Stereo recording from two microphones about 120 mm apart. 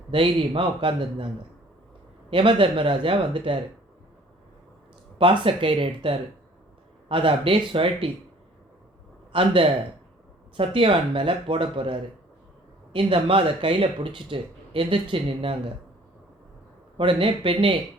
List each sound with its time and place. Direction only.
0.1 s speech: 45° right (ahead or behind)
2.3 s speech: 45° right (ahead or behind)
5.1 s speech: 45° right (ahead or behind)
9.3 s speech: 45° right (ahead or behind)
17.0 s speech: 45° right (ahead or behind)